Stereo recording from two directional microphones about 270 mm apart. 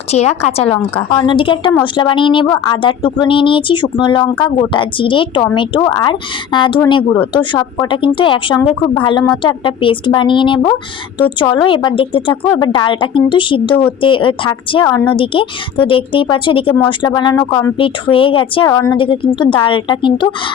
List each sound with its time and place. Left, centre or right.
0.1 s a woman's voice: left